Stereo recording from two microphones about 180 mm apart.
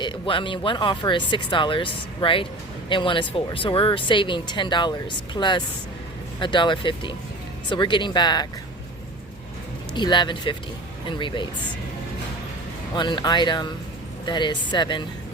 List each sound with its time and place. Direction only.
0.0 s speech: 25° left (ahead or behind)
9.9 s speech: 25° left (ahead or behind)
13.0 s speech: 25° left (ahead or behind)